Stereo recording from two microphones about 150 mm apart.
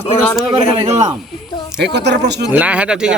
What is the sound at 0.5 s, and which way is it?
Speech, 45° right (ahead or behind).